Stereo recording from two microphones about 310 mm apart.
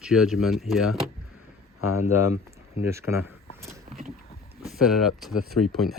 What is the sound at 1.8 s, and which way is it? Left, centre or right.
Speech, left.